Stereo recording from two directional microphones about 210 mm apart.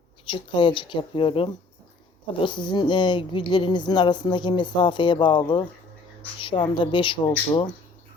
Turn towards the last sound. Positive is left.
turn(degrees=20)  # may be behind; listen again after turning